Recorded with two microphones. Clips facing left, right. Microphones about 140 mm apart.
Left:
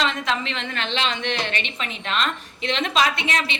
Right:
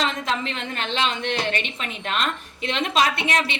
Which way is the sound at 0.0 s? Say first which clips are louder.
Left 1 dB; 45° right (ahead or behind).